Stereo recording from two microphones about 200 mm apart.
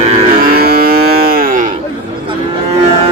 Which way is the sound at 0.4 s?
50° right (ahead or behind).